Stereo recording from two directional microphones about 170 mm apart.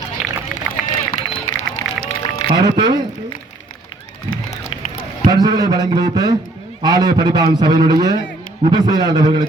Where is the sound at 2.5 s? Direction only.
25° right (ahead or behind).